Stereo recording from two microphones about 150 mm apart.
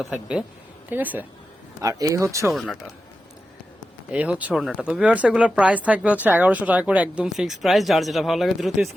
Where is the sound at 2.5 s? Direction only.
Centre (ahead or behind).